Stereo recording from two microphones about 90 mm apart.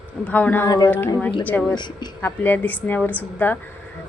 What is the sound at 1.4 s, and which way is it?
Speech, 15° left (ahead or behind).